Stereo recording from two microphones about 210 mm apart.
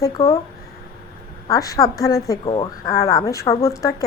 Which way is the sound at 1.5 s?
15° left (ahead or behind).